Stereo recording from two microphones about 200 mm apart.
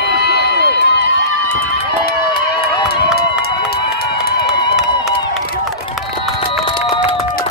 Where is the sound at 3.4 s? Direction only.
50° left (ahead or behind).